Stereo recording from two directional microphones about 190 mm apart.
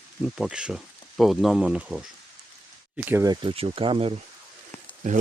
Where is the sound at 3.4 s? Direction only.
30° right (ahead or behind).